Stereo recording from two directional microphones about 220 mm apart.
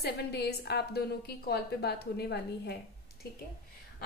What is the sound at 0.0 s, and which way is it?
A woman's voice, 45° left (ahead or behind).